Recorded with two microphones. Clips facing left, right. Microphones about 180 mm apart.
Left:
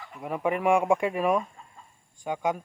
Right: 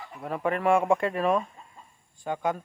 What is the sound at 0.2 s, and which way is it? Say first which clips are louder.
Speech: left 1 dB; 15° left (ahead or behind).